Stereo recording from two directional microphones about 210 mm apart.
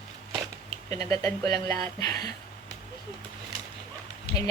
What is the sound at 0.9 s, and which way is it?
A woman's voice, 15° left (ahead or behind).